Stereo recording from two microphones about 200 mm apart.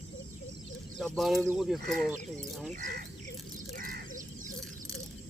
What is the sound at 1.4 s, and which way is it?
Speech, 10° right (ahead or behind).